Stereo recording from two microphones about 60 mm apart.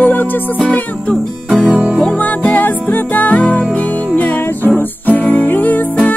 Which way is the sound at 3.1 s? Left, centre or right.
Left.